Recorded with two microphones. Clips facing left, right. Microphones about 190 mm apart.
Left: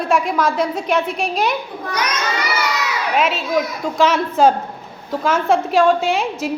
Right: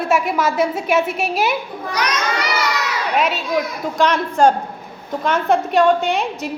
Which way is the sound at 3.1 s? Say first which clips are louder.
Left 1 dB; centre (ahead or behind).